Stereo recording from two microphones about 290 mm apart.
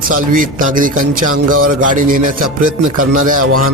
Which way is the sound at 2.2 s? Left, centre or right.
Right.